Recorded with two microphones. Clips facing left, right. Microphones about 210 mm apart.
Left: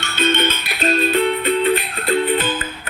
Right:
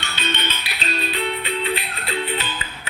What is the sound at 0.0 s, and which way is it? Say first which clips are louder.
Music: left 9 dB; 50° left (ahead or behind).